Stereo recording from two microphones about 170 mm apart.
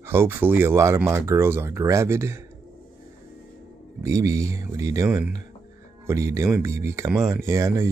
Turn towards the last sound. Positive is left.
turn(degrees=-15)  # may be behind; listen again after turning